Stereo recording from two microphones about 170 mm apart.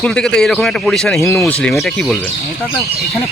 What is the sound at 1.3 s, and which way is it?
Speech, 15° left (ahead or behind).